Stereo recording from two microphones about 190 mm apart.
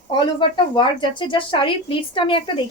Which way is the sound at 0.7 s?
25° left (ahead or behind).